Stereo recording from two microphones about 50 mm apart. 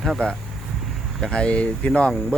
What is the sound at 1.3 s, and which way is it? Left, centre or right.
Speech, left.